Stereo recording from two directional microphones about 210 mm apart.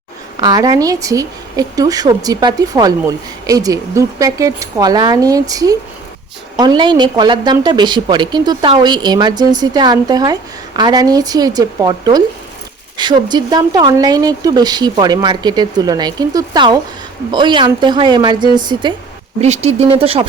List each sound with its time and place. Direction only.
0.3 s speech: 20° right (ahead or behind)
19.4 s speech: 30° right (ahead or behind)